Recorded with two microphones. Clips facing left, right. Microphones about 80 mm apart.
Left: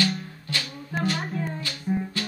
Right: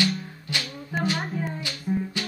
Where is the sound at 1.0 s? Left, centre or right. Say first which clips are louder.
Even; centre.